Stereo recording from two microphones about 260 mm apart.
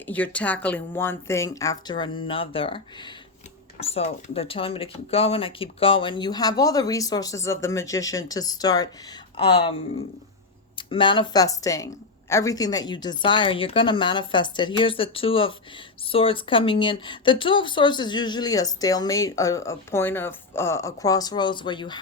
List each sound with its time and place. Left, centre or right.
0.0 s speech: centre